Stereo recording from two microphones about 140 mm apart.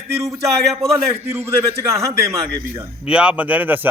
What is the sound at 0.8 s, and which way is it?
Speech, 45° right (ahead or behind).